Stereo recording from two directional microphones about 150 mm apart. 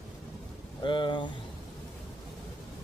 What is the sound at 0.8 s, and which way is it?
Speech, 30° left (ahead or behind).